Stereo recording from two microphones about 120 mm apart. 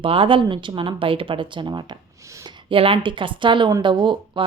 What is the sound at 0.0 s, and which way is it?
Speech, 50° right (ahead or behind).